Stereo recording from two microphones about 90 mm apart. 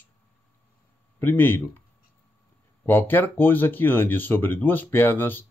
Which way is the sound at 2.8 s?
25° left (ahead or behind).